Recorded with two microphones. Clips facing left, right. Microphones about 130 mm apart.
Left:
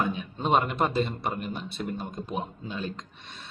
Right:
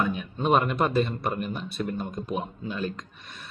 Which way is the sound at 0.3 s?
25° left (ahead or behind).